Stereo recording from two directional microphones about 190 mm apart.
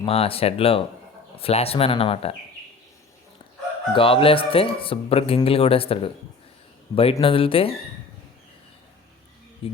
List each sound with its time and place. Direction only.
0.0 s speech: 30° left (ahead or behind)
3.9 s speech: 30° left (ahead or behind)